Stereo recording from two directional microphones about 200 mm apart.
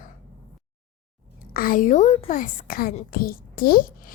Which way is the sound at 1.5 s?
45° left (ahead or behind).